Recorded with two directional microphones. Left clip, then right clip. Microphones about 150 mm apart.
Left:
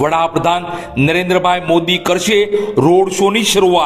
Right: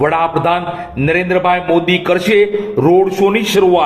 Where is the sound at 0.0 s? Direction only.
40° left (ahead or behind).